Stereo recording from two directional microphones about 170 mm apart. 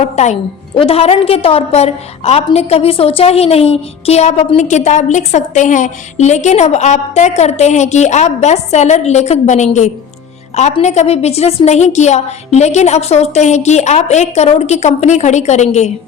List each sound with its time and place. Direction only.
0.0 s a woman's voice: 40° left (ahead or behind)